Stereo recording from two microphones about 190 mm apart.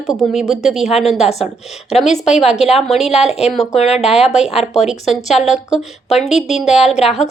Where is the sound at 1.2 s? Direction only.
35° left (ahead or behind).